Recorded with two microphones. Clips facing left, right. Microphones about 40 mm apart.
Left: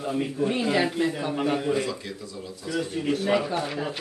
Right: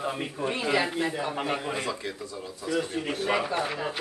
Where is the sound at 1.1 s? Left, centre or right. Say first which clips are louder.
Left 3 dB; centre.